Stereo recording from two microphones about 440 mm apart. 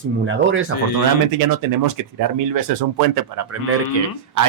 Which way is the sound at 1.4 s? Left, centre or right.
Right.